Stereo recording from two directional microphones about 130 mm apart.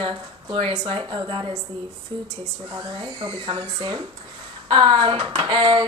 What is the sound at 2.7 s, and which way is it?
Speech, 30° right (ahead or behind).